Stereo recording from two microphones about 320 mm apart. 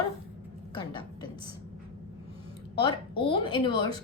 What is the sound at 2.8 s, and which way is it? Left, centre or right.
A woman's voice, centre.